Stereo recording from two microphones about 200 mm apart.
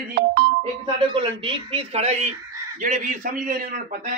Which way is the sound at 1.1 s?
25° right (ahead or behind).